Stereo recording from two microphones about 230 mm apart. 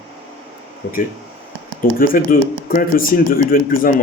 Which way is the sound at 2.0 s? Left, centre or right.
Left.